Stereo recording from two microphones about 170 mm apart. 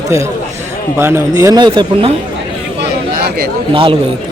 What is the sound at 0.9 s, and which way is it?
A man's voice, 15° right (ahead or behind).